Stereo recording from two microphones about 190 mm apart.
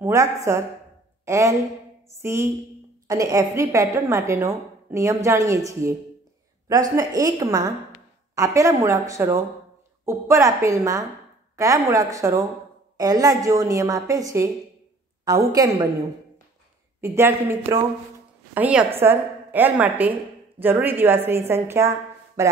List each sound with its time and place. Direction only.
0.0 s a woman's voice: 15° right (ahead or behind)
17.0 s a woman's voice: 15° right (ahead or behind)